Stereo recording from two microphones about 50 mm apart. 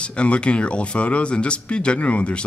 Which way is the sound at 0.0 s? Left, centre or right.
Left.